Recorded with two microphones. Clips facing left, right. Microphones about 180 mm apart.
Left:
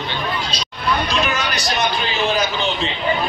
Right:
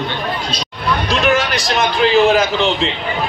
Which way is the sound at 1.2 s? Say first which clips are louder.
Right 7 dB; 75° right (ahead or behind).